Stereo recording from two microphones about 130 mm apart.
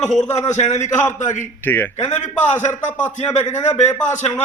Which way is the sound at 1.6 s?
15° left (ahead or behind).